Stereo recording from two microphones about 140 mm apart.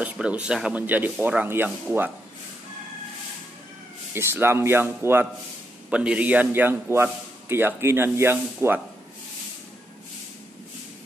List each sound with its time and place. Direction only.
0.0 s a man's voice: 10° right (ahead or behind)
4.1 s a man's voice: 15° right (ahead or behind)